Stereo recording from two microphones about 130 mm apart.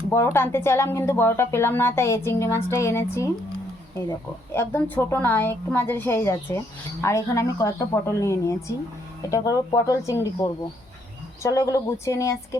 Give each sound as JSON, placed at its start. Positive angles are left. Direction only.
{"t": 0.1, "sound": "a woman's voice", "side_deg": 20}
{"t": 4.5, "sound": "a woman's voice", "side_deg": 15}